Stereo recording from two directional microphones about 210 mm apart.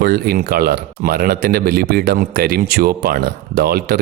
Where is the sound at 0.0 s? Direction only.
45° right (ahead or behind).